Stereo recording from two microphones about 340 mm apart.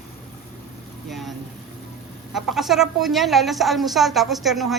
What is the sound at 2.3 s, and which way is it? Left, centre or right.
Speech, centre.